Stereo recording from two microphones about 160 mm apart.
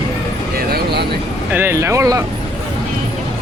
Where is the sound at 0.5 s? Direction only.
85° right.